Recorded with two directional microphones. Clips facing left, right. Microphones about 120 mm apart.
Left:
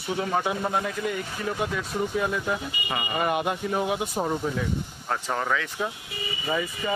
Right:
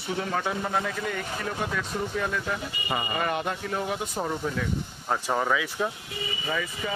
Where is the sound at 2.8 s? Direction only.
Centre (ahead or behind).